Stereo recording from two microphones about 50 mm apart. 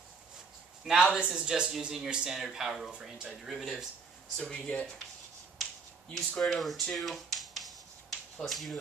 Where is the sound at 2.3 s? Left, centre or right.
Centre.